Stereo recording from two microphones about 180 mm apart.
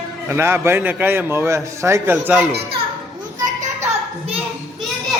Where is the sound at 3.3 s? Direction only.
45° right (ahead or behind).